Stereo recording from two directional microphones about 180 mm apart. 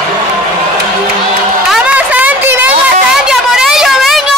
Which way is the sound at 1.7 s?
5° right (ahead or behind).